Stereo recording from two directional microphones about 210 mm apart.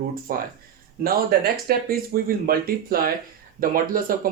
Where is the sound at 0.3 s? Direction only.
45° right (ahead or behind).